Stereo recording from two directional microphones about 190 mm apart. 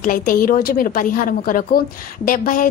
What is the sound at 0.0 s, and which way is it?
A woman's voice, 45° left (ahead or behind).